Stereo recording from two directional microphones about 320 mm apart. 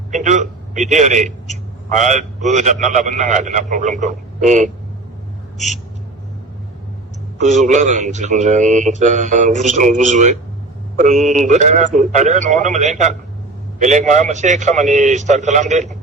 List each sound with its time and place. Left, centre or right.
0.1 s a man's voice: right
7.3 s speech: right